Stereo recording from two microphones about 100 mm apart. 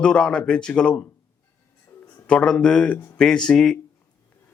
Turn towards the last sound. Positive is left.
turn(degrees=5)  # may be behind; listen again after turning